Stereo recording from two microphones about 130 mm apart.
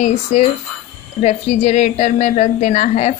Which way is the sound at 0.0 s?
65° left (ahead or behind).